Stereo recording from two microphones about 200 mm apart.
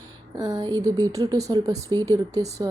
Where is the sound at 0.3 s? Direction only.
20° right (ahead or behind).